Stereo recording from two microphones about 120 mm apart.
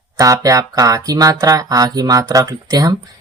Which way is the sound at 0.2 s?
30° right (ahead or behind).